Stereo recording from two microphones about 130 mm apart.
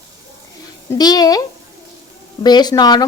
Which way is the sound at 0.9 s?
30° left (ahead or behind).